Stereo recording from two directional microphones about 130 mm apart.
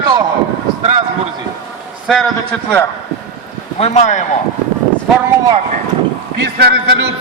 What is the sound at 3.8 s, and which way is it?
Speech, 55° left (ahead or behind).